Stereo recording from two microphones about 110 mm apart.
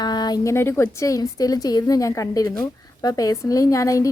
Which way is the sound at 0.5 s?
25° left (ahead or behind).